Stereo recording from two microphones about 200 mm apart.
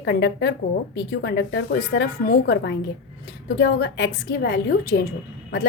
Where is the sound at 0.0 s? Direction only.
60° left (ahead or behind).